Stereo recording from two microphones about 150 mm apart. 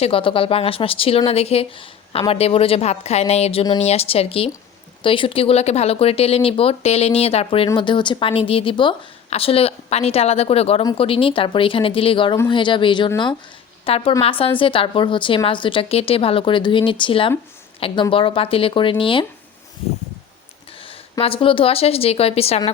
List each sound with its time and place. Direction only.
0.0 s a woman's voice: 35° left (ahead or behind)
20.8 s a woman's voice: 40° left (ahead or behind)